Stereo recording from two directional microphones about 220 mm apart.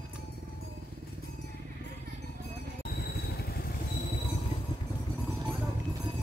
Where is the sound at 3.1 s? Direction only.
45° left (ahead or behind).